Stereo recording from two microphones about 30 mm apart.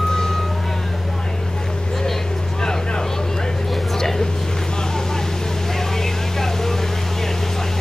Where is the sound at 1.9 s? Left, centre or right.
Centre.